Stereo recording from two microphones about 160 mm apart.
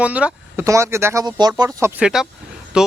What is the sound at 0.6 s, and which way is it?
Speech, 20° right (ahead or behind).